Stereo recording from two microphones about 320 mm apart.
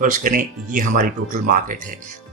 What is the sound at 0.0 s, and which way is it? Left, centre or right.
Speech, right.